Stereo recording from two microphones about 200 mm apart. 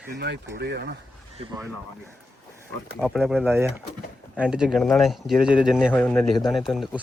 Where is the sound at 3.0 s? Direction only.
Centre (ahead or behind).